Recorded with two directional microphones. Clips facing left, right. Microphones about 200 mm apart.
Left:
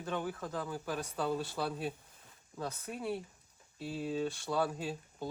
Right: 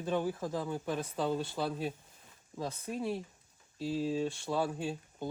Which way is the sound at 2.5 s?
15° right (ahead or behind).